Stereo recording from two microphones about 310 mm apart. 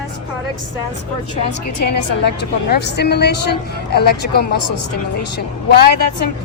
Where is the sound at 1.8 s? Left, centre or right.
Left.